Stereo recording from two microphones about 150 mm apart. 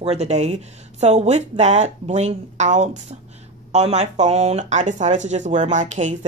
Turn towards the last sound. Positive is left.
turn(degrees=-55)  # may be behind; listen again after turning